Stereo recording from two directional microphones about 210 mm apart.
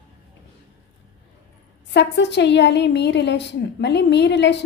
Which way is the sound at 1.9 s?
55° left (ahead or behind).